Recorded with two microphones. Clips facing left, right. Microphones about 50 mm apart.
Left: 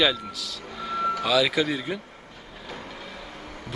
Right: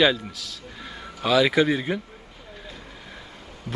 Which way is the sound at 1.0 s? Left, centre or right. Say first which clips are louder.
Left 17 dB; left.